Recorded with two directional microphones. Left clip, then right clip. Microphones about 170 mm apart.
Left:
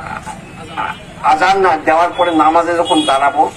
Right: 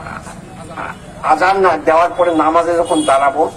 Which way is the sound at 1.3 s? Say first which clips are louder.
Even; 50° right (ahead or behind).